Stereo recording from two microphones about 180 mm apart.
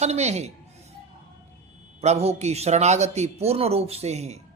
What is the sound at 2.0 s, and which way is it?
Speech, 35° right (ahead or behind).